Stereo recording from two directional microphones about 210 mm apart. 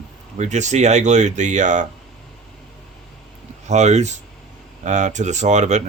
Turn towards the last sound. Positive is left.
turn(degrees=-35)  # may be behind; listen again after turning